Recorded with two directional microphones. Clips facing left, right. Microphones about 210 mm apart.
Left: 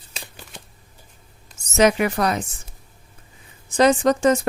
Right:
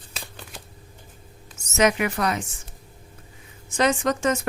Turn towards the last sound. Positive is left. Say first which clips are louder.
# left 6 dB
turn(degrees=35)  # may be behind; listen again after turning